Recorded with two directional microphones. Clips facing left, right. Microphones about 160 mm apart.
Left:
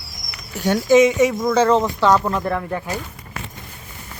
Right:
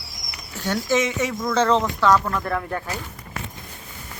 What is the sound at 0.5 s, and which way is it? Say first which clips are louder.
Speech: left 8 dB; 15° left (ahead or behind).